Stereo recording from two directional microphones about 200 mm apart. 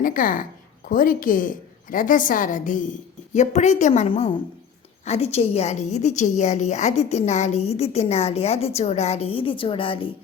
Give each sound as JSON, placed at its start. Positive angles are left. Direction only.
{"t": 0.0, "sound": "a woman's voice", "side_deg": 40}